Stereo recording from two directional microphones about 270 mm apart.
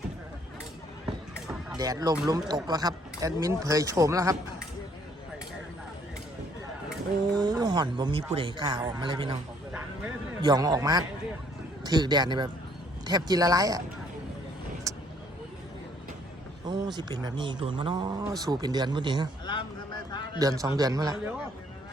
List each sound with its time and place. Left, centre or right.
1.7 s speech: centre
7.3 s speech: centre
10.4 s speech: centre
14.9 s vehicle: centre
16.6 s speech: centre
20.1 s a sound: centre
20.4 s speech: centre